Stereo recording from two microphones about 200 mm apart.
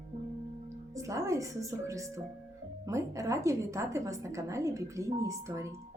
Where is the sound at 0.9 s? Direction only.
15° right (ahead or behind).